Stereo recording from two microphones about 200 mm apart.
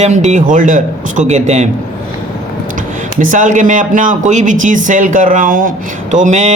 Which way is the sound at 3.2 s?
40° right (ahead or behind).